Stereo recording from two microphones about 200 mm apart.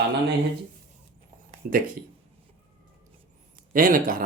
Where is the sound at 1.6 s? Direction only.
45° right (ahead or behind).